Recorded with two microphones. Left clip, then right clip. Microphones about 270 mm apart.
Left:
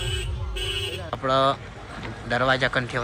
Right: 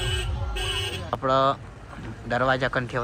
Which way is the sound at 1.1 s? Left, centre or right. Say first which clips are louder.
Even; centre.